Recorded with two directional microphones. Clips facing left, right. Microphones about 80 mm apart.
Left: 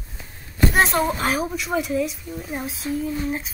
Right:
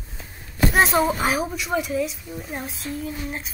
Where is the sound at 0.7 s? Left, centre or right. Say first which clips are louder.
Right 2 dB; centre.